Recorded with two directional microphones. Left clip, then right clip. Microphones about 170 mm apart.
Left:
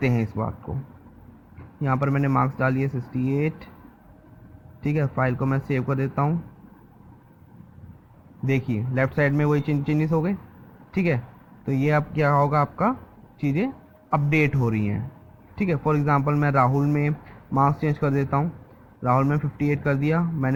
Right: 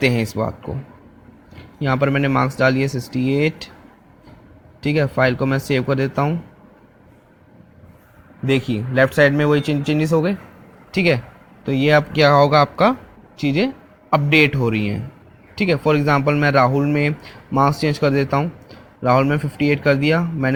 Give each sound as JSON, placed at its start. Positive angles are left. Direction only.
{"t": 0.0, "sound": "speech", "side_deg": -25}
{"t": 1.8, "sound": "speech", "side_deg": -30}
{"t": 4.8, "sound": "speech", "side_deg": -20}
{"t": 8.4, "sound": "speech", "side_deg": -20}
{"t": 12.2, "sound": "speech", "side_deg": -35}
{"t": 13.4, "sound": "speech", "side_deg": -25}